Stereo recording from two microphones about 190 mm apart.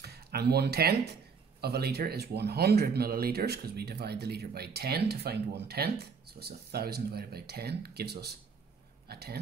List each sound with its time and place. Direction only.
0.0 s speech: 55° right (ahead or behind)